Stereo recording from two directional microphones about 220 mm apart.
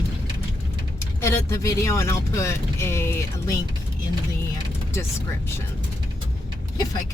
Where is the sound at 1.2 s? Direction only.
15° left (ahead or behind).